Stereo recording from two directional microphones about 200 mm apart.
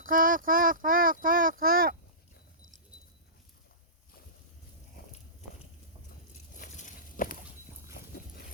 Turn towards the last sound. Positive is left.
turn(degrees=40)  # may be behind; listen again after turning